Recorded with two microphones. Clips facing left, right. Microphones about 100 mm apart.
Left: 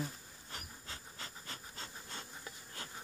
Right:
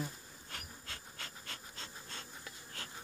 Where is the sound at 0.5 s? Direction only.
15° left (ahead or behind).